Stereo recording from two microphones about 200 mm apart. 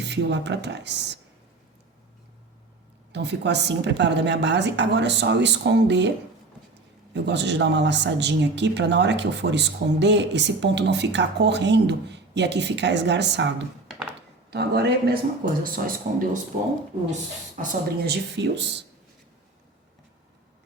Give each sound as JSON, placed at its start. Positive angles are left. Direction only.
{"t": 0.0, "sound": "speech", "side_deg": -60}
{"t": 3.1, "sound": "speech", "side_deg": -60}
{"t": 7.1, "sound": "speech", "side_deg": -60}
{"t": 14.1, "sound": "a sound", "side_deg": -55}
{"t": 15.6, "sound": "speech", "side_deg": -45}
{"t": 17.6, "sound": "speech", "side_deg": -50}